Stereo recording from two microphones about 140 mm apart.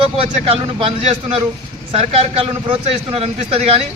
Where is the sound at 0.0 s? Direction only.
45° right (ahead or behind).